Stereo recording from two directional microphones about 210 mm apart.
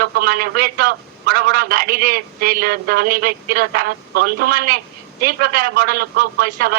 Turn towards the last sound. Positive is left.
turn(degrees=-45)  # may be behind; listen again after turning